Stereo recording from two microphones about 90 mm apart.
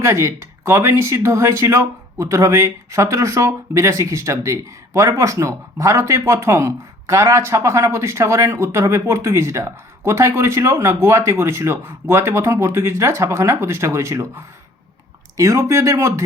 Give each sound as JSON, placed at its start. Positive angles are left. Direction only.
{"t": 0.0, "sound": "speech", "side_deg": -30}